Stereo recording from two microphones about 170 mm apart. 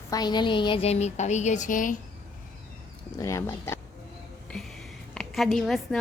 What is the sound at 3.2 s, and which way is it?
Speech, 15° left (ahead or behind).